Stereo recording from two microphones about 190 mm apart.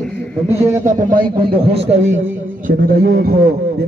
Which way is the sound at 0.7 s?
20° right (ahead or behind).